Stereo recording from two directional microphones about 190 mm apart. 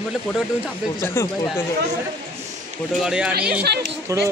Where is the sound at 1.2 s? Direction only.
15° left (ahead or behind).